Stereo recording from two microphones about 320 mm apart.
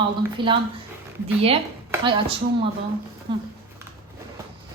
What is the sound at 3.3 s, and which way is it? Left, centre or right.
Speech, centre.